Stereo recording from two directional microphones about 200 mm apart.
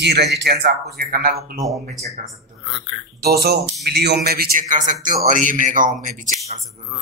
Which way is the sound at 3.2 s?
50° right (ahead or behind).